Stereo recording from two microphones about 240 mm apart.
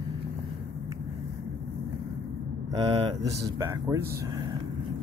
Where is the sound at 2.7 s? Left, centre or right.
Right.